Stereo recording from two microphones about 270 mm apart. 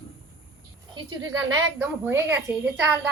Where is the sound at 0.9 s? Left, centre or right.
Centre.